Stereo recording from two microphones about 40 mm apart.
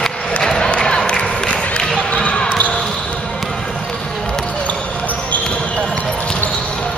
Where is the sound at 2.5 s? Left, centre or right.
Left.